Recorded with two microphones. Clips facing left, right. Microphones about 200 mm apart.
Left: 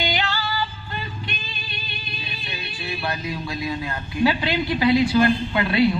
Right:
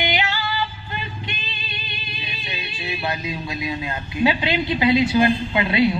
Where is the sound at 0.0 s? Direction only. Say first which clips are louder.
Right 1 dB; 20° right (ahead or behind).